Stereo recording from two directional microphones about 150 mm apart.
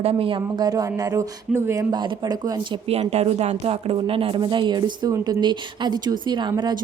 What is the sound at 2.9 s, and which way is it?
Speech, 45° right (ahead or behind).